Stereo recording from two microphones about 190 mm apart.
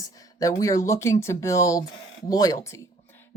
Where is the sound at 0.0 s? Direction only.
20° left (ahead or behind).